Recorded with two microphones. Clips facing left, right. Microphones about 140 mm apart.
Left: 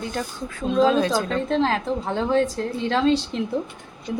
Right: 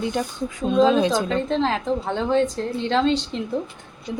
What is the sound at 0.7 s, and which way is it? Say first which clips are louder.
A woman's voice: right 1 dB; centre (ahead or behind).